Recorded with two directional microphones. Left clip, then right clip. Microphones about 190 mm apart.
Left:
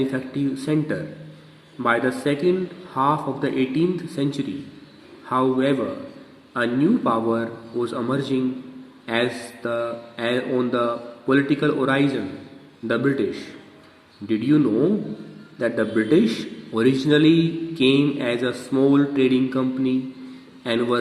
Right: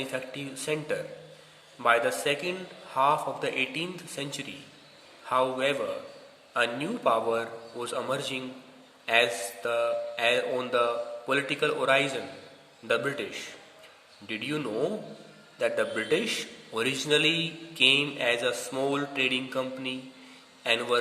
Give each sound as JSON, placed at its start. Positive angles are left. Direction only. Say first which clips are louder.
{"t": 0.0, "sound": "a man's voice", "louder": "left 9 dB", "side_deg": -20}